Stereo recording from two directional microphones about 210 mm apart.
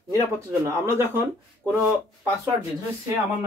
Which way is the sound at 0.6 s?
10° right (ahead or behind).